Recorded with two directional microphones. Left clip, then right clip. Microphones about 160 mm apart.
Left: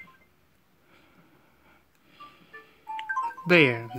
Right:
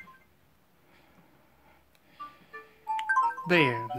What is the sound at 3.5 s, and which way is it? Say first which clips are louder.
Speech: left 9 dB; 20° left (ahead or behind).